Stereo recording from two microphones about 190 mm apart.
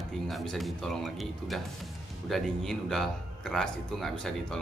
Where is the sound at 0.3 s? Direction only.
Centre (ahead or behind).